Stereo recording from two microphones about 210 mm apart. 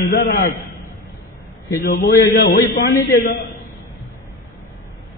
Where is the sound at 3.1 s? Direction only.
40° left (ahead or behind).